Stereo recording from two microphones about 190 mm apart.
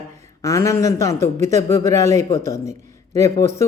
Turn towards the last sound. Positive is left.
turn(degrees=15)  # may be behind; listen again after turning